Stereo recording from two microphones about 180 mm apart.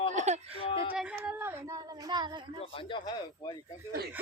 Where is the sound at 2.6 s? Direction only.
30° left (ahead or behind).